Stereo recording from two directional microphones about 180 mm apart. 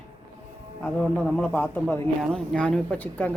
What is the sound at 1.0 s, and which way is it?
Speech, 5° left (ahead or behind).